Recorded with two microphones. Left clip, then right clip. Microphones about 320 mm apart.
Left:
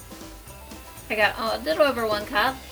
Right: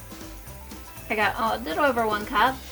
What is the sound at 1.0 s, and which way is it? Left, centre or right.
A woman's voice, right.